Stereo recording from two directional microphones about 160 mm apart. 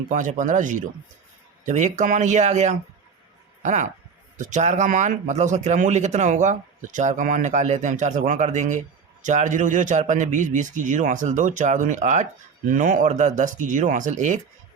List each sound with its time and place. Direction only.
0.1 s a man's voice: 50° right (ahead or behind)